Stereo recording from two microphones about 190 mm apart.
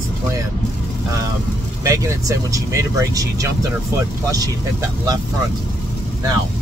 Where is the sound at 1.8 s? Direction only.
15° right (ahead or behind).